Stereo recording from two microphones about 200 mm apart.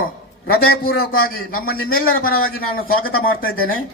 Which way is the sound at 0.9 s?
50° left (ahead or behind).